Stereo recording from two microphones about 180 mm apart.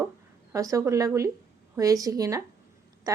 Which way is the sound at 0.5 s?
20° right (ahead or behind).